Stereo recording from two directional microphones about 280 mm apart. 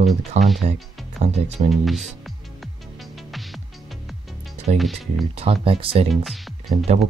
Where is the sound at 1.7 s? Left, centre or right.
Centre.